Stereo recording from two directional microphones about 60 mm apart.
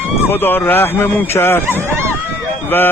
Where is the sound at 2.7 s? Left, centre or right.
Left.